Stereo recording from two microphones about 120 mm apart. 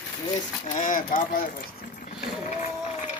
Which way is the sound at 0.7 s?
90° left.